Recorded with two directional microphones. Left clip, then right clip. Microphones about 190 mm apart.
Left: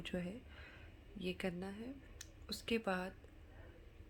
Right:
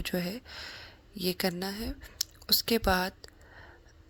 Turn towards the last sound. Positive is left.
turn(degrees=-50)  # may be behind; listen again after turning